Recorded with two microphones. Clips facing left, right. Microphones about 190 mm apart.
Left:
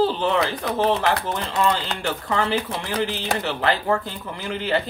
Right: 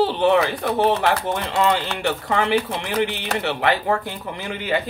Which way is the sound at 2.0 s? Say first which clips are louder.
Right 2 dB; 20° right (ahead or behind).